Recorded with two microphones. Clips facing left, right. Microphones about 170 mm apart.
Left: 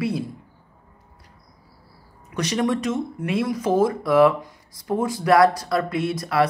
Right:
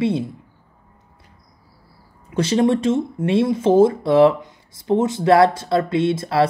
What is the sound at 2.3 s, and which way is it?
Speech, 30° right (ahead or behind).